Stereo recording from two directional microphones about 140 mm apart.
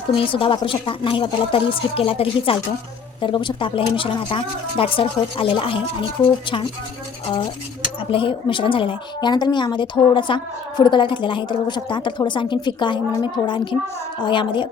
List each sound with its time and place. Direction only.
0.2 s a woman's voice: 40° left (ahead or behind)
8.1 s a woman's voice: 40° left (ahead or behind)